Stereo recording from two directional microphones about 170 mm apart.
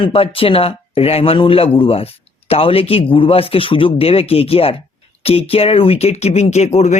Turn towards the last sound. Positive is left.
turn(degrees=40)  # may be behind; listen again after turning